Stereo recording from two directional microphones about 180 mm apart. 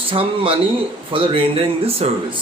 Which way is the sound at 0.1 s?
30° right (ahead or behind).